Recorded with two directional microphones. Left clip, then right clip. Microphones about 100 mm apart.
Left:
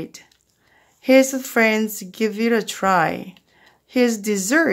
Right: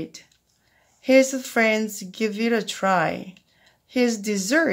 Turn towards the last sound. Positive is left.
turn(degrees=30)  # may be behind; listen again after turning